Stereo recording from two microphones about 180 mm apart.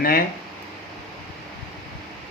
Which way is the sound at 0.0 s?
55° left (ahead or behind).